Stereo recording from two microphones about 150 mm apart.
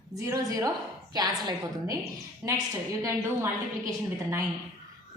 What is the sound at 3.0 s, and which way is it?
Speech, 20° right (ahead or behind).